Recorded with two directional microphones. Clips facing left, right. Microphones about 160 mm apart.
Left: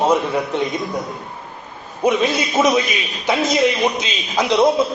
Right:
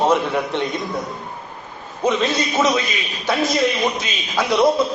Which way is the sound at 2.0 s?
10° left (ahead or behind).